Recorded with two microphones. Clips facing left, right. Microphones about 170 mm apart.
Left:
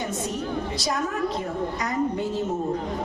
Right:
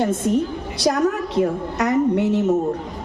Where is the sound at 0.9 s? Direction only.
70° right (ahead or behind).